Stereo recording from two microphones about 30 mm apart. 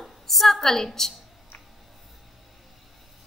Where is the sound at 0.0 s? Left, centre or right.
Centre.